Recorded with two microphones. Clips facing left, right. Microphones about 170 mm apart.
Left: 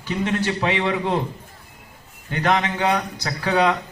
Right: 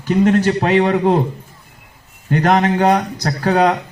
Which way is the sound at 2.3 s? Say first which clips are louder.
Right 7 dB; 45° right (ahead or behind).